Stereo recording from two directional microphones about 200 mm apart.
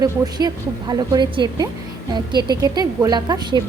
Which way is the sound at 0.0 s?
20° right (ahead or behind).